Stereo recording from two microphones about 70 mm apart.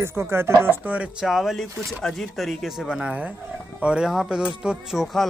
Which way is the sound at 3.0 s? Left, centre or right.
Right.